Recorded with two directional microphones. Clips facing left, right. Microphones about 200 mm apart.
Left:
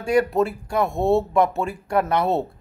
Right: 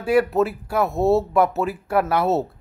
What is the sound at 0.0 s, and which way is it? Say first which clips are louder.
Speech: right 1 dB; 5° right (ahead or behind).